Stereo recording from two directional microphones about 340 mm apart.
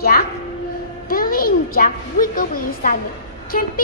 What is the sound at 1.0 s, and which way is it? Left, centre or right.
A woman's voice, left.